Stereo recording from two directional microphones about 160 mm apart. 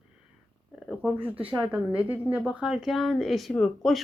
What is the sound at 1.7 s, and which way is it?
A woman's voice, 5° right (ahead or behind).